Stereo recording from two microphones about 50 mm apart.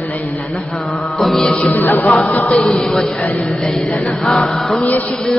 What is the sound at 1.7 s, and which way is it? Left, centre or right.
Music, left.